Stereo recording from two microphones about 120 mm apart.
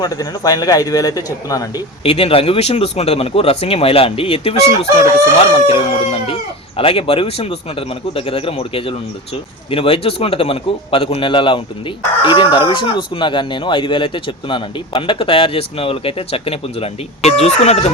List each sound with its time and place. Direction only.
0.0 s a man's voice: 30° left (ahead or behind)
2.0 s speech: 50° left (ahead or behind)